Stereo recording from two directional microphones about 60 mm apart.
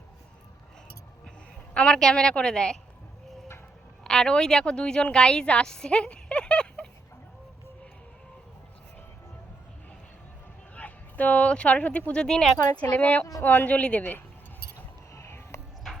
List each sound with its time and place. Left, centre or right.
1.7 s a woman's voice: centre
4.0 s a woman's voice: centre
10.8 s speech: left
12.8 s speech: left
15.1 s a sound: left